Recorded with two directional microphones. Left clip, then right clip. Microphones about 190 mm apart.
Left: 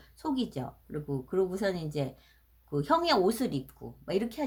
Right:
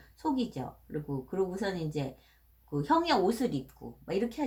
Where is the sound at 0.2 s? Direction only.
45° left (ahead or behind).